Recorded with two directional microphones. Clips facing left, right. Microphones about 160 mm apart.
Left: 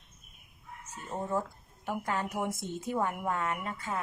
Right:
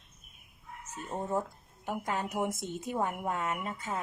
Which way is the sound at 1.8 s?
15° right (ahead or behind).